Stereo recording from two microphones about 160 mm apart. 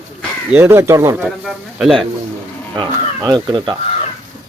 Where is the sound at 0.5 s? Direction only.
15° right (ahead or behind).